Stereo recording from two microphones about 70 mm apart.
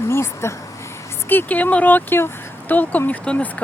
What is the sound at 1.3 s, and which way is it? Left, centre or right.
Speech, left.